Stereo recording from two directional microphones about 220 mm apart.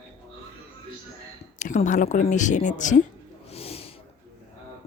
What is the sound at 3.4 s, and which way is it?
Snort, 25° left (ahead or behind).